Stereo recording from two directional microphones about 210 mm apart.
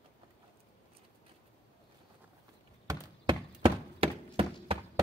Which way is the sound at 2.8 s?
25° right (ahead or behind).